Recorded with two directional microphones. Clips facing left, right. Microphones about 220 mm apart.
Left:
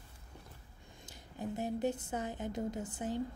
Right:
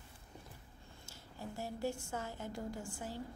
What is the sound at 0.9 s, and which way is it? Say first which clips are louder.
A woman's voice: left 3 dB; 15° left (ahead or behind).